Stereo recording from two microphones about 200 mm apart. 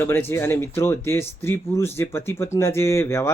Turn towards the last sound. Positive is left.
turn(degrees=15)  # may be behind; listen again after turning